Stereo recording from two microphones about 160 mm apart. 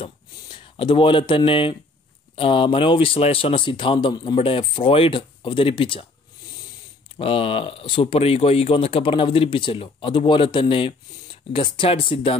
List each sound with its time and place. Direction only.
0.0 s a sound: 30° left (ahead or behind)
2.3 s speech: 35° left (ahead or behind)
7.2 s speech: 35° left (ahead or behind)